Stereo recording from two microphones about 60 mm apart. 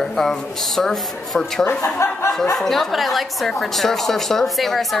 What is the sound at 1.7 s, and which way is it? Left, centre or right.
Speech, left.